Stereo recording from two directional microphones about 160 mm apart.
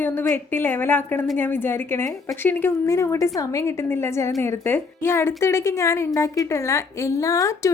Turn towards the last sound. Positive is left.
turn(degrees=20)  # may be behind; listen again after turning